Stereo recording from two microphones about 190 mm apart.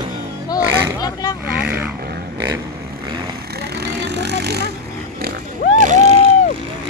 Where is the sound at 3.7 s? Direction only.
60° right (ahead or behind).